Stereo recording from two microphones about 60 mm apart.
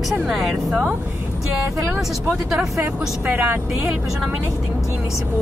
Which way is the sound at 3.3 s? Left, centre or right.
Right.